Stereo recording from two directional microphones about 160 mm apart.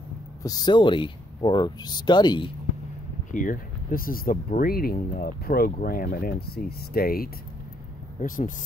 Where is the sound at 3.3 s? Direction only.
55° left (ahead or behind).